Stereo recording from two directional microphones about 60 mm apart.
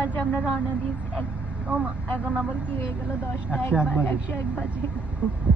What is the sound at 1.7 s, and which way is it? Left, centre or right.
Speech, right.